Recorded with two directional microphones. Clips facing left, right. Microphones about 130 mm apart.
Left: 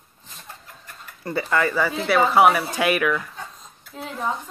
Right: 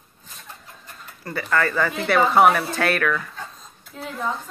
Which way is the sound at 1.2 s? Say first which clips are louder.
Left 1 dB; 20° left (ahead or behind).